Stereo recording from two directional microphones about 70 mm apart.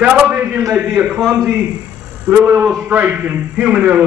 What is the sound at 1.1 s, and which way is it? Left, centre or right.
Speech, centre.